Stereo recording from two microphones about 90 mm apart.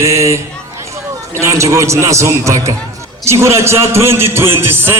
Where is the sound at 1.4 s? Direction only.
35° right (ahead or behind).